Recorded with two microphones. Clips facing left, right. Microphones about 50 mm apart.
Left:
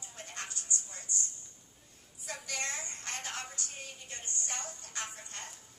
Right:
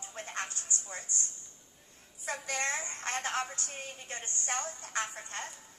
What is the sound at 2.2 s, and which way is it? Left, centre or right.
A woman's voice, right.